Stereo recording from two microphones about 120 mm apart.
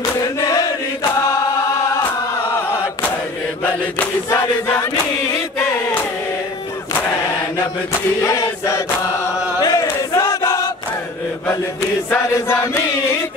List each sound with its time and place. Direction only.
0.2 s chant: 30° left (ahead or behind)
3.6 s chant: 20° left (ahead or behind)
5.6 s a sound: 20° left (ahead or behind)
8.2 s chant: 25° left (ahead or behind)
9.6 s a sound: 30° left (ahead or behind)
12.1 s chant: 20° left (ahead or behind)